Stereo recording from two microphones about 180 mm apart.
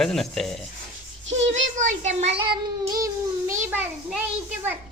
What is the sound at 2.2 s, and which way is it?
Child singing, 35° right (ahead or behind).